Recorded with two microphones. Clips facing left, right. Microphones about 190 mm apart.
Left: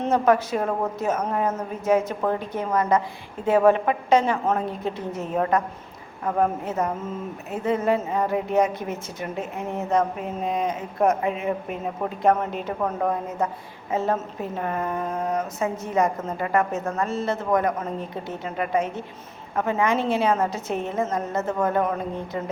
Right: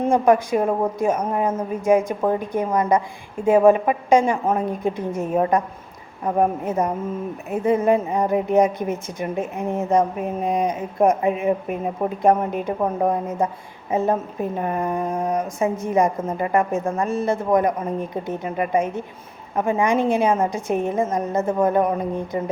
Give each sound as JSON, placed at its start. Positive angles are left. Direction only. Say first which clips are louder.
{"t": 0.0, "sound": "a woman's voice", "louder": "right 3 dB", "side_deg": -10}